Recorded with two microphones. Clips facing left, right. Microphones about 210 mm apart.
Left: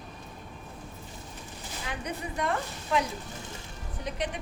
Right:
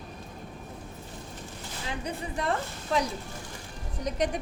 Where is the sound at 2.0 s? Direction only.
30° right (ahead or behind).